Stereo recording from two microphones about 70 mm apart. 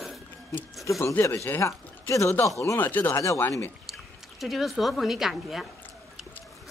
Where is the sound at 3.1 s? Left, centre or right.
Left.